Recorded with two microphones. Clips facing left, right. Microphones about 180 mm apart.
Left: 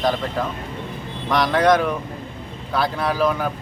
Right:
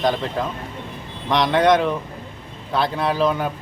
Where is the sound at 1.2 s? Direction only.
20° right (ahead or behind).